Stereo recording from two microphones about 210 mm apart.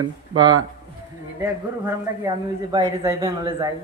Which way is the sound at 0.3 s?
20° right (ahead or behind).